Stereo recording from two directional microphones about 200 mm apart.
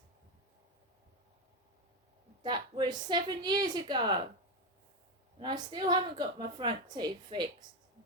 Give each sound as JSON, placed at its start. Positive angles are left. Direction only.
{"t": 2.4, "sound": "a woman's voice", "side_deg": -20}
{"t": 5.4, "sound": "a woman's voice", "side_deg": -20}